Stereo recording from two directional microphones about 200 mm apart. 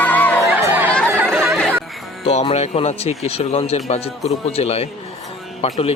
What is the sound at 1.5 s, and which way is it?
Music, centre (ahead or behind).